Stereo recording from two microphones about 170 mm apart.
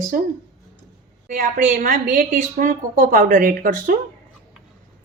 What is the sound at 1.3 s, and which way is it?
Speech, 55° right (ahead or behind).